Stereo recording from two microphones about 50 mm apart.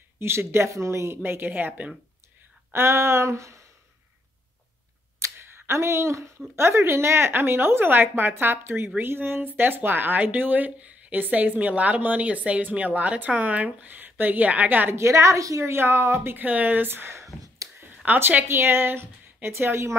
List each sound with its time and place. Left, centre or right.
0.2 s a woman's voice: right
2.7 s a sound: right
5.2 s a sound: right
6.5 s a woman's voice: right
14.9 s a woman's voice: right
15.7 s a woman's voice: right
16.3 s speech: right
18.0 s speech: right
18.5 s speech: right
19.5 s a sound: right